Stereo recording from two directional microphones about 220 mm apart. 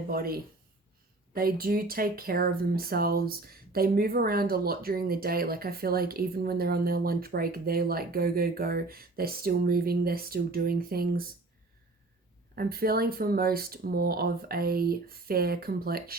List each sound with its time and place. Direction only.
0.1 s speech: 40° right (ahead or behind)
12.5 s speech: 45° right (ahead or behind)